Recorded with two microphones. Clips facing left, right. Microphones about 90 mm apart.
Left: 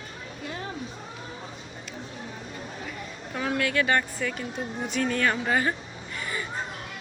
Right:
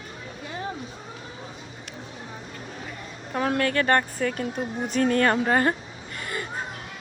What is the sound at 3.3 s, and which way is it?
Speech, 40° right (ahead or behind).